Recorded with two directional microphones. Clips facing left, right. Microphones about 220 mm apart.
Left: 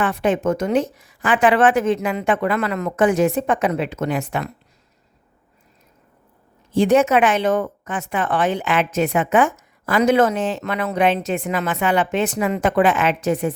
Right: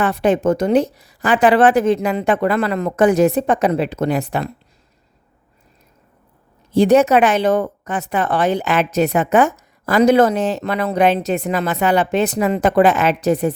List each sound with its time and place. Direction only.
0.0 s a woman's voice: 35° right (ahead or behind)
6.7 s a woman's voice: 40° right (ahead or behind)